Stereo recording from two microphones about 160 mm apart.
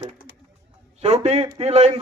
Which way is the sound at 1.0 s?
40° right (ahead or behind).